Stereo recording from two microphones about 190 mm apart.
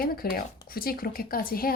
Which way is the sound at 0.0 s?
50° left (ahead or behind).